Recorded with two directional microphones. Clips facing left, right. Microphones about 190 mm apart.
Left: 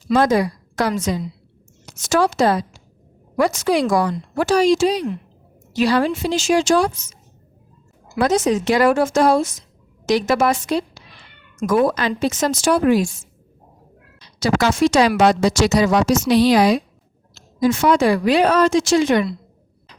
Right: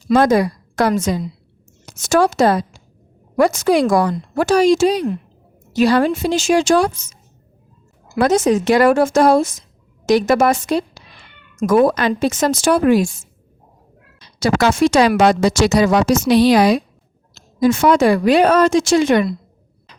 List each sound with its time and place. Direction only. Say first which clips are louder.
0.1 s a woman's voice: right 3 dB; 50° right (ahead or behind)
8.1 s a woman's voice: right 3 dB; 50° right (ahead or behind)
14.2 s a woman's voice: right 2 dB; 55° right (ahead or behind)